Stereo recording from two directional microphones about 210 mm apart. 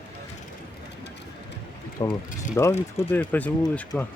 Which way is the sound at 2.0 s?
20° left (ahead or behind).